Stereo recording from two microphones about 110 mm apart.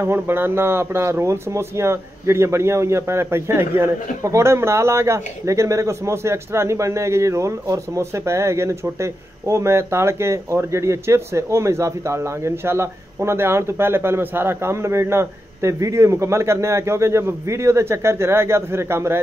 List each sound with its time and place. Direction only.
0.0 s speech: 20° right (ahead or behind)